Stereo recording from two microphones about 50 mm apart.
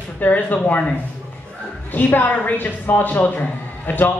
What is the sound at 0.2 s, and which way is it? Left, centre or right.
Speech, left.